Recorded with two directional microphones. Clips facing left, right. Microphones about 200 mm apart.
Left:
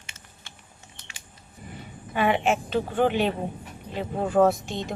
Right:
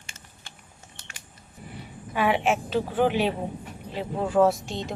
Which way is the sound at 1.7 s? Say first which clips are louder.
Left 1 dB; centre (ahead or behind).